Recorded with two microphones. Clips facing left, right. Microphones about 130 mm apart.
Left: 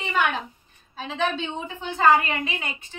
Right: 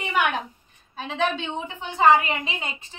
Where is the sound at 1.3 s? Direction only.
15° right (ahead or behind).